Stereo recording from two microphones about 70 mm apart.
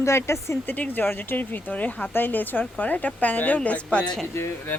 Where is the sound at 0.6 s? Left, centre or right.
Left.